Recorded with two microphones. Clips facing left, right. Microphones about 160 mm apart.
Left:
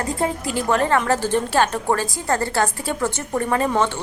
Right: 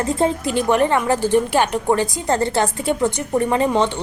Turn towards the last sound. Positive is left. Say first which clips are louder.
# right 3 dB
turn(degrees=-20)  # may be behind; listen again after turning